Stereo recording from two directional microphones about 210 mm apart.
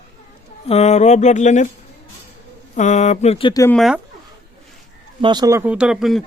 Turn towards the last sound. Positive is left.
turn(degrees=0)  # may be behind; listen again after turning